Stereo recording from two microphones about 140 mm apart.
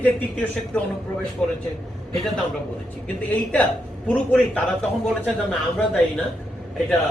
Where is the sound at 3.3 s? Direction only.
10° left (ahead or behind).